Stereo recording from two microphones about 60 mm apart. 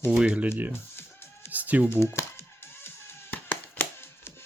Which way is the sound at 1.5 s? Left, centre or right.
Right.